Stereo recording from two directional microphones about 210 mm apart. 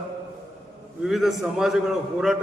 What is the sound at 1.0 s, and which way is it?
A man's voice, centre (ahead or behind).